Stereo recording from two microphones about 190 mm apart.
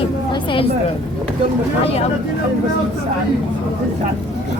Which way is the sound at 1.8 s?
30° left (ahead or behind).